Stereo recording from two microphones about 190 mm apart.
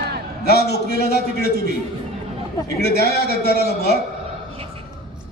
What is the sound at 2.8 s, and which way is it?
A man's voice, 60° left (ahead or behind).